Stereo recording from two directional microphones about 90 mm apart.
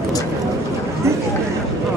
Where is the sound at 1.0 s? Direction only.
30° right (ahead or behind).